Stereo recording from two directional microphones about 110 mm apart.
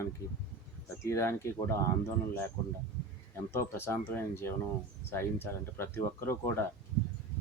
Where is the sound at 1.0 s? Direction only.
25° left (ahead or behind).